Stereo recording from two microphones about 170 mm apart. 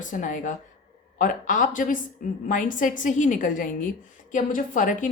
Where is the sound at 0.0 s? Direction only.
50° left (ahead or behind).